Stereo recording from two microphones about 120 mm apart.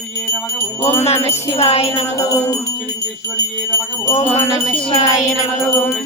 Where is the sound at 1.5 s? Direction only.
55° left (ahead or behind).